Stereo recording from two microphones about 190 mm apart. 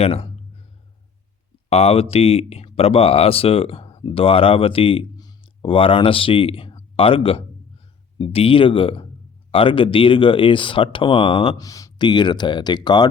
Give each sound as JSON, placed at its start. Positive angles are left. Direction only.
{"t": 0.0, "sound": "speech", "side_deg": 30}
{"t": 1.7, "sound": "speech", "side_deg": 30}